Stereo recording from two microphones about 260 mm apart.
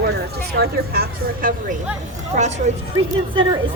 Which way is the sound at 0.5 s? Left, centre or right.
Right.